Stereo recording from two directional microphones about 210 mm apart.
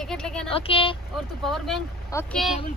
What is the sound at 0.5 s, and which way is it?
Speech, 25° left (ahead or behind).